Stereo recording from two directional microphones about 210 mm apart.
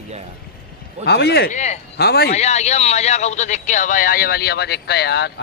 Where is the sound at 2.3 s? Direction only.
30° left (ahead or behind).